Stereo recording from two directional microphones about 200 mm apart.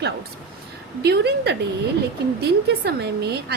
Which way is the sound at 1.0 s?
55° right (ahead or behind).